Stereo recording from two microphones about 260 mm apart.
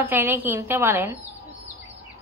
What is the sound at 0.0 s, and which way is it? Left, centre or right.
A woman's voice, centre.